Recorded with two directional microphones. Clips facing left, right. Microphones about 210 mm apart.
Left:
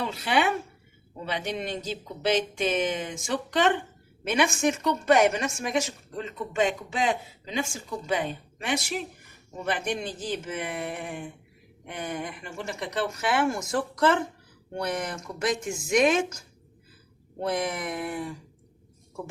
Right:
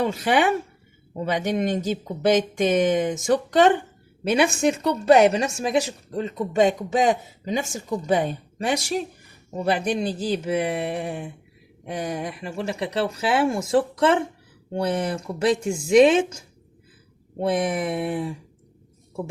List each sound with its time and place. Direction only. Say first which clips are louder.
0.0 s a woman's voice: right 5 dB; 45° right (ahead or behind); by 18.3 s 30° right (ahead or behind)